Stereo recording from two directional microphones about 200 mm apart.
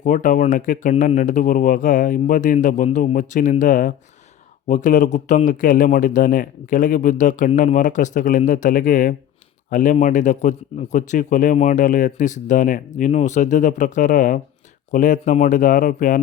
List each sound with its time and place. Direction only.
0.0 s a man's voice: 40° left (ahead or behind)